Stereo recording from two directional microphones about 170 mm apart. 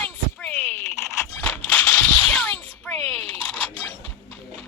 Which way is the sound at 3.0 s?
35° right (ahead or behind).